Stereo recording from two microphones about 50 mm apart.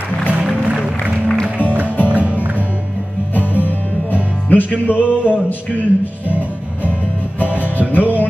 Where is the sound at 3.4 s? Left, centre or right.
Left.